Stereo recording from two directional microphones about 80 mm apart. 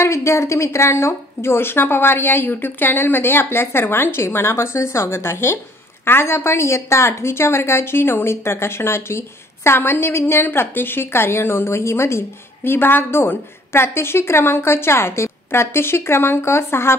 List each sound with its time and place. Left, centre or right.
0.0 s a woman's voice: left